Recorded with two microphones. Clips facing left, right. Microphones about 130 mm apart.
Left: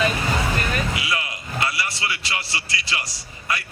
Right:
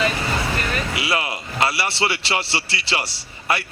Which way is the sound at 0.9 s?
30° right (ahead or behind).